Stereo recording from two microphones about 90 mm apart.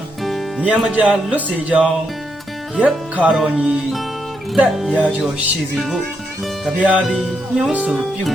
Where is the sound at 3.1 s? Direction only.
15° right (ahead or behind).